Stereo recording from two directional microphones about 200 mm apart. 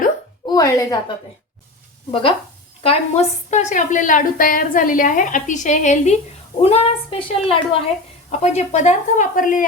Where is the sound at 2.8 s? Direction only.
30° left (ahead or behind).